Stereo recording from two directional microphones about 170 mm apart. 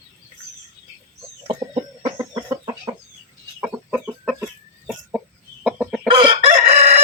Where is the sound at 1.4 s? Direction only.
30° right (ahead or behind).